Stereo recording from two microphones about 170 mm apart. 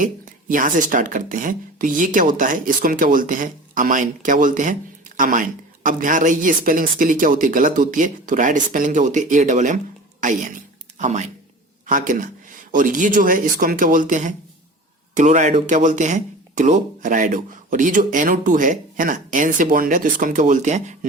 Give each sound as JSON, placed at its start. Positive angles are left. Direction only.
{"t": 0.0, "sound": "speech", "side_deg": -50}